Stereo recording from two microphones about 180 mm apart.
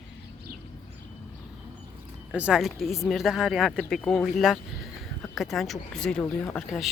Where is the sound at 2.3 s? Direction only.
5° right (ahead or behind).